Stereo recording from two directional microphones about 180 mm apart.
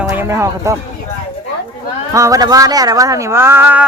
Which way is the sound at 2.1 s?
20° right (ahead or behind).